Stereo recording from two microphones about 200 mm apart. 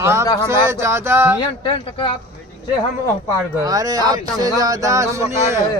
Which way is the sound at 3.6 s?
20° right (ahead or behind).